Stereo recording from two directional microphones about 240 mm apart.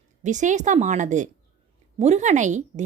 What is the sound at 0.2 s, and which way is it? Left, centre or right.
Speech, right.